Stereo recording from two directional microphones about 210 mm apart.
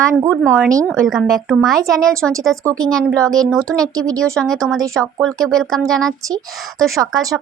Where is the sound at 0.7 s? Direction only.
15° right (ahead or behind).